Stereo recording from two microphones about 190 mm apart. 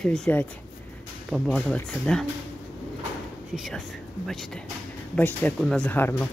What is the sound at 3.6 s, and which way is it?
Speech, centre (ahead or behind).